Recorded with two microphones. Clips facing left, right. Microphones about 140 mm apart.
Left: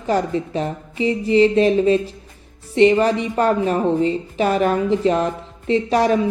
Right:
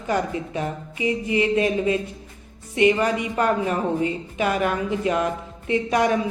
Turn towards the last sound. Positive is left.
turn(degrees=30)  # may be behind; listen again after turning